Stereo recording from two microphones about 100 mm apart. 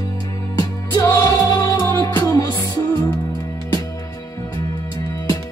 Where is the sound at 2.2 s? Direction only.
35° left (ahead or behind).